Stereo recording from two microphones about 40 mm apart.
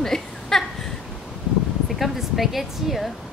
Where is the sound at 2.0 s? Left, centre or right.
Centre.